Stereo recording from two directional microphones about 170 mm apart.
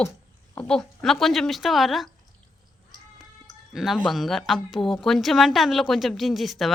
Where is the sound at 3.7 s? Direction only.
Centre (ahead or behind).